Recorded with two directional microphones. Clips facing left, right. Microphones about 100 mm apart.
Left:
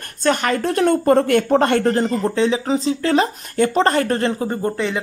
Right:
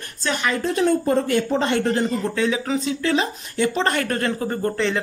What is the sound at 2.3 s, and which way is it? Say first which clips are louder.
Speech: left 4 dB; 30° left (ahead or behind).